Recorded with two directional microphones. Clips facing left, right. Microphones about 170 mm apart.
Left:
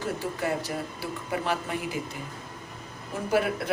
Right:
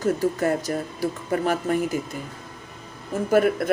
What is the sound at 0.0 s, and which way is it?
Speech, 45° right (ahead or behind).